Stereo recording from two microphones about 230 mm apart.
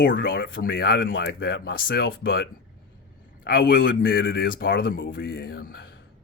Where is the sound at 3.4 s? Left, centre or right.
Left.